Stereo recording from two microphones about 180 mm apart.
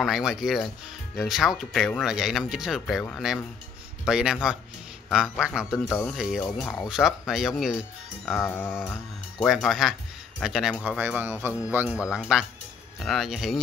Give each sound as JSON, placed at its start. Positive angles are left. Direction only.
{"t": 0.0, "sound": "speech", "side_deg": 0}
{"t": 8.4, "sound": "a sound", "side_deg": 15}
{"t": 8.6, "sound": "speech", "side_deg": 0}